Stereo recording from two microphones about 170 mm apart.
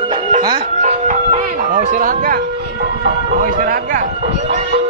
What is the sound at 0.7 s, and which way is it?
Music, 45° right (ahead or behind).